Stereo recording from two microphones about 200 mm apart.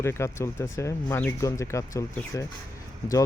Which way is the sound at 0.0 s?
15° left (ahead or behind).